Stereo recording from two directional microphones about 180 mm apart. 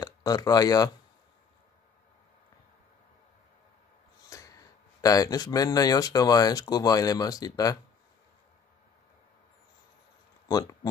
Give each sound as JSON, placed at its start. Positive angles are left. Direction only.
{"t": 0.0, "sound": "speech", "side_deg": 20}
{"t": 4.3, "sound": "a sound", "side_deg": 20}
{"t": 5.0, "sound": "speech", "side_deg": 20}
{"t": 10.5, "sound": "speech", "side_deg": 20}